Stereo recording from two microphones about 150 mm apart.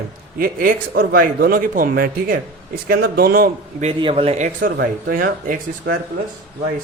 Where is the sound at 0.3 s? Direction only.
75° right (ahead or behind).